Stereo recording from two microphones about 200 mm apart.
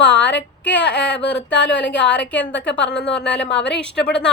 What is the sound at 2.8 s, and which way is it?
A woman's voice, 5° left (ahead or behind).